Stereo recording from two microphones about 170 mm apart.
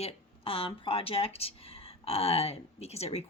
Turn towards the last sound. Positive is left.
turn(degrees=40)  # may be behind; listen again after turning